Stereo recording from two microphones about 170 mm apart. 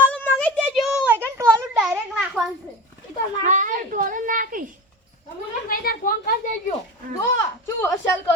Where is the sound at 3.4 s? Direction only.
45° right (ahead or behind).